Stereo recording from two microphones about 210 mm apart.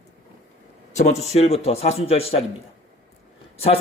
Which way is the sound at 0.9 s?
30° left (ahead or behind).